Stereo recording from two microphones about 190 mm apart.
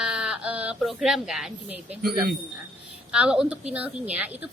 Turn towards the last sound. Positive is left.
turn(degrees=-5)  # may be behind; listen again after turning